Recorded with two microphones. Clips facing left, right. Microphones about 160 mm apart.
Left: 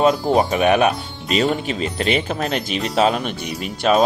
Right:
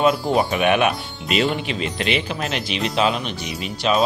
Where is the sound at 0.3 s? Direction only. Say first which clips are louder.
Left 2 dB; 35° left (ahead or behind).